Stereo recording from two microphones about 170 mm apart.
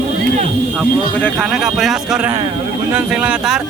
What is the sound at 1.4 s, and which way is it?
Speech, centre (ahead or behind).